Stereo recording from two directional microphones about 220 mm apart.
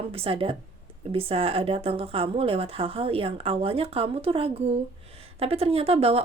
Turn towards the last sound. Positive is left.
turn(degrees=-25)  # may be behind; listen again after turning